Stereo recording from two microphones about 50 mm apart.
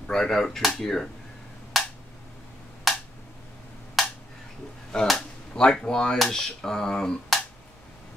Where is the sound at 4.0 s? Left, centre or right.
Centre.